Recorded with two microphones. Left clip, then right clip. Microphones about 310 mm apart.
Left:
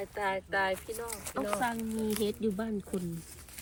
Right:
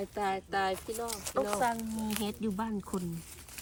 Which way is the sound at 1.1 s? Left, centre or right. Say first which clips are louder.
Right 2 dB; centre.